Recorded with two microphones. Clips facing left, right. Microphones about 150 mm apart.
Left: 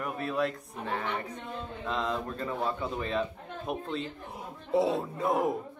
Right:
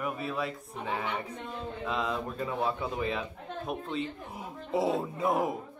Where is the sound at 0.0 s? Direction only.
5° right (ahead or behind).